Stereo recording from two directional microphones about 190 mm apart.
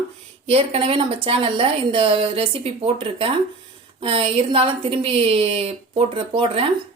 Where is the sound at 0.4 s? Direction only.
30° right (ahead or behind).